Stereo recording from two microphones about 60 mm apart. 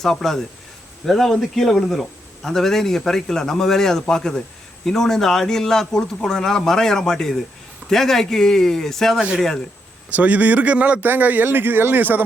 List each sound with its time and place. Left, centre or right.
0.0 s a man's voice: centre
10.1 s speech: right